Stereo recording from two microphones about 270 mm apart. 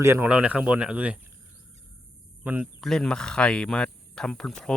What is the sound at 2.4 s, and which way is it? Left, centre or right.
Speech, centre.